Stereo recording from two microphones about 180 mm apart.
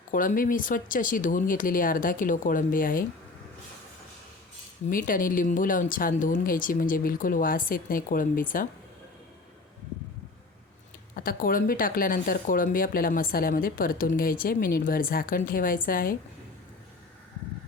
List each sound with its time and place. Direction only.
0.1 s speech: 50° left (ahead or behind)
4.9 s speech: 50° left (ahead or behind)
11.1 s speech: 50° left (ahead or behind)